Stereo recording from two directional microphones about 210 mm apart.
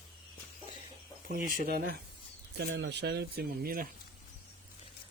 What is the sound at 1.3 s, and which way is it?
Speech, 45° right (ahead or behind).